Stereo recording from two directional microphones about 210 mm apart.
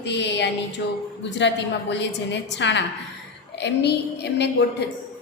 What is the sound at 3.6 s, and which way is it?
Child singing, 55° left (ahead or behind).